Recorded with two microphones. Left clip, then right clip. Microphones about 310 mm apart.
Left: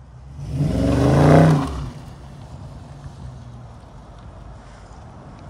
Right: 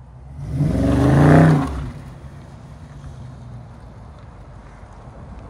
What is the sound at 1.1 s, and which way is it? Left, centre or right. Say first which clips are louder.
Vehicle: even; left.